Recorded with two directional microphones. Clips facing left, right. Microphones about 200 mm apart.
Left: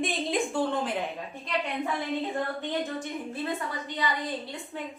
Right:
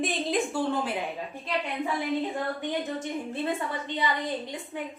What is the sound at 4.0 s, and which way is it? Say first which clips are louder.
Speech: right 1 dB; 20° right (ahead or behind).